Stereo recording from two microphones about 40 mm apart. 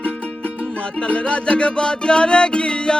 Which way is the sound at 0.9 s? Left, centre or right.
Left.